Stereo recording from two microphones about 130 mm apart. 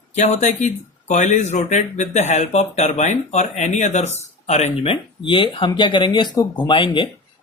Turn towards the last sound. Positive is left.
turn(degrees=40)  # may be behind; listen again after turning